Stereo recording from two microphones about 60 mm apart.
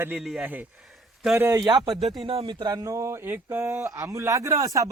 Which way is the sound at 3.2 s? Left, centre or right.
Right.